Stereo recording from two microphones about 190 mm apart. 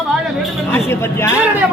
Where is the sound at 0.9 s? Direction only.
15° left (ahead or behind).